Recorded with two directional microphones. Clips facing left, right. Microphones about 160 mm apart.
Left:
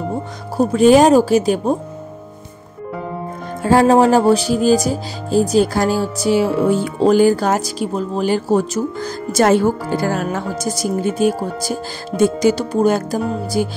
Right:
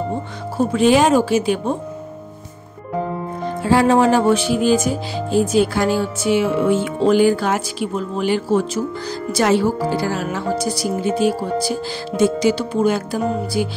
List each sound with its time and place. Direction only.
0.6 s speech: 40° left (ahead or behind)
3.6 s speech: 40° left (ahead or behind)